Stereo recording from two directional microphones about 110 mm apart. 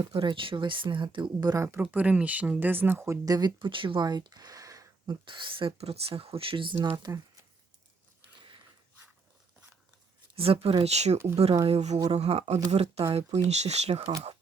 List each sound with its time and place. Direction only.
0.1 s speech: 50° right (ahead or behind)
1.8 s speech: 15° right (ahead or behind)
3.2 s speech: 40° right (ahead or behind)
5.2 s speech: 50° right (ahead or behind)
6.7 s speech: 25° right (ahead or behind)
10.3 s speech: 60° right (ahead or behind)
10.8 s speech: 85° right; by 13.4 s 70° right (ahead or behind)
13.5 s speech: 85° right